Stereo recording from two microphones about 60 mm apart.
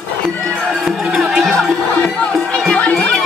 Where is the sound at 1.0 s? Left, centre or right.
Centre.